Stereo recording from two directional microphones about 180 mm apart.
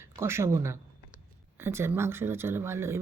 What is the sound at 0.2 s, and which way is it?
Speech, 15° right (ahead or behind).